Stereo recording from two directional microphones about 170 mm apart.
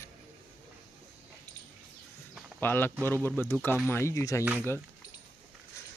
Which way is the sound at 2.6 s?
10° left (ahead or behind).